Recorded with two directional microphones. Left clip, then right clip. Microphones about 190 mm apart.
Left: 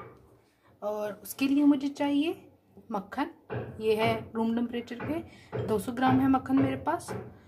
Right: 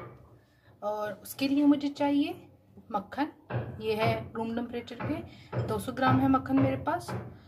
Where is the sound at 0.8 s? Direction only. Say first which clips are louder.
Even; 35° left (ahead or behind).